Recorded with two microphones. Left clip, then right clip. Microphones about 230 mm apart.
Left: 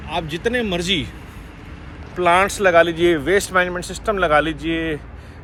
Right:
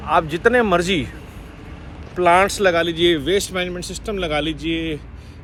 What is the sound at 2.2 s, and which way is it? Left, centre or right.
Speech, centre.